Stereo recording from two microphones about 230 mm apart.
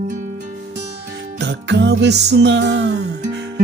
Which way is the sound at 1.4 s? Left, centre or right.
Right.